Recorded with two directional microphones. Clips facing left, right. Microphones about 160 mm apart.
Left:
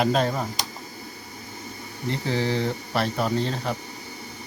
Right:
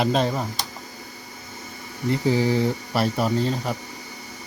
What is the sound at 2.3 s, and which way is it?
Speech, 10° right (ahead or behind).